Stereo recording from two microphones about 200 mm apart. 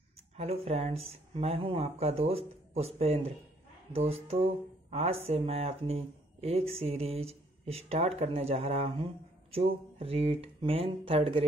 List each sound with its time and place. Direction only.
0.4 s speech: 30° right (ahead or behind)